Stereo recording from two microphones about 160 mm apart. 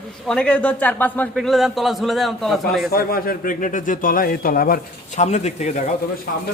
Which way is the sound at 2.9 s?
65° left (ahead or behind).